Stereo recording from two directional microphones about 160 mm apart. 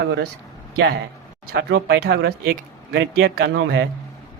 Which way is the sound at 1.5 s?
85° right.